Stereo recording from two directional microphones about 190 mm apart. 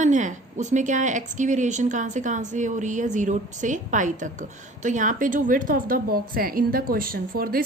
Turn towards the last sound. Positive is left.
turn(degrees=-50)  # may be behind; listen again after turning